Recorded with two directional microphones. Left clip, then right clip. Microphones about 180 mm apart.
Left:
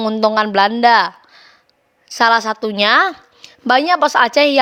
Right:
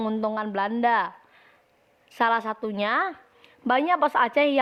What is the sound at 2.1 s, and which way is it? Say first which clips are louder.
A woman's voice: left 10 dB; 40° left (ahead or behind).